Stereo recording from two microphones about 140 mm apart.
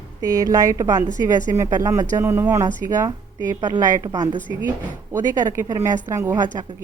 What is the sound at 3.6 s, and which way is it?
A woman's voice, 25° right (ahead or behind).